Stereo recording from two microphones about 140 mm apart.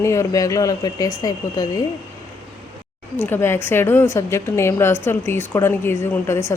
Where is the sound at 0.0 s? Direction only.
20° left (ahead or behind).